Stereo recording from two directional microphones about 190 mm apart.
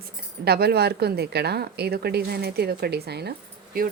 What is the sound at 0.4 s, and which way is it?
A woman's voice, 55° right (ahead or behind).